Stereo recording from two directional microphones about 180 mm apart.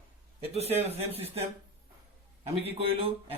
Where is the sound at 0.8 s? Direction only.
35° right (ahead or behind).